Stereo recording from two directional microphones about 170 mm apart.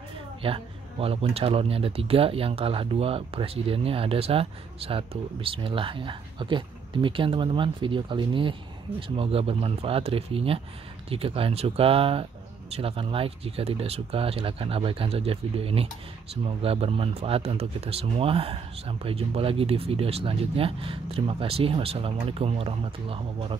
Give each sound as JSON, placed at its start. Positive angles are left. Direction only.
{"t": 0.4, "sound": "speech", "side_deg": -35}